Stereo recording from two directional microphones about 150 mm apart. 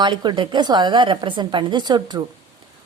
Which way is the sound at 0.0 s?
30° right (ahead or behind).